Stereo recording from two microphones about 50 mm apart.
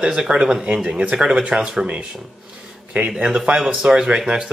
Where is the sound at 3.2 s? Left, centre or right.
Centre.